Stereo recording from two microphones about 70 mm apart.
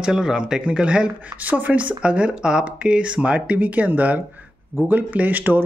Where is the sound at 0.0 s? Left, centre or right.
Centre.